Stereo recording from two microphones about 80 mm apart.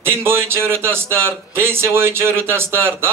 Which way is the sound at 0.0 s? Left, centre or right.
Right.